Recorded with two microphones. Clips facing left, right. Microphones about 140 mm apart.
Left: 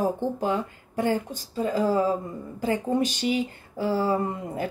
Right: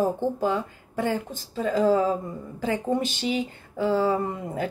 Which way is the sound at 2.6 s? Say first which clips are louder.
Left 1 dB; 45° left (ahead or behind).